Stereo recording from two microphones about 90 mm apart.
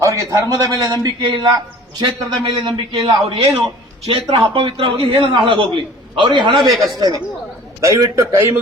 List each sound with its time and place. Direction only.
0.0 s a sound: 35° right (ahead or behind)
0.5 s a man's voice: 40° right (ahead or behind)
2.0 s a man's voice: 65° right (ahead or behind)
7.8 s a man's voice: 35° right (ahead or behind)